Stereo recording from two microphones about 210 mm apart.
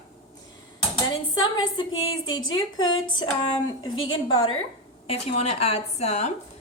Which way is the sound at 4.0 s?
75° left (ahead or behind).